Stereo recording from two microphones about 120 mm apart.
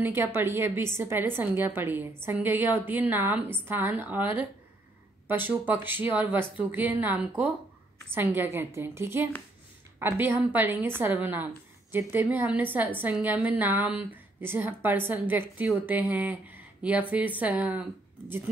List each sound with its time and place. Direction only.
0.0 s a woman's voice: 20° right (ahead or behind)